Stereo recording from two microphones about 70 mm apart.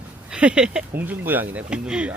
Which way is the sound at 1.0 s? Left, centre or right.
Right.